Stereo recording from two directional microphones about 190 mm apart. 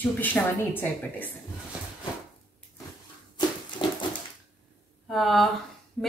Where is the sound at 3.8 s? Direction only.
25° left (ahead or behind).